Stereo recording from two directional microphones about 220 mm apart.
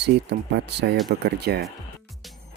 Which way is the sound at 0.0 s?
50° right (ahead or behind).